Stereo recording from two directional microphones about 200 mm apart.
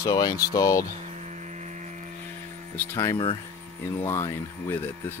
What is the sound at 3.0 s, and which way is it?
Speech, 20° left (ahead or behind).